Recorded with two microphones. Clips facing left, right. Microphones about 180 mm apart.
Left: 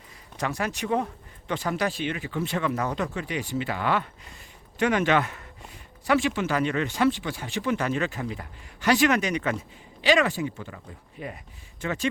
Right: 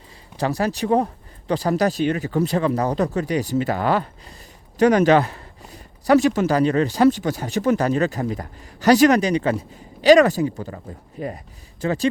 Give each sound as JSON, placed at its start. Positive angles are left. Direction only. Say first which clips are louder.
{"t": 0.3, "sound": "speech", "louder": "right 7 dB", "side_deg": -35}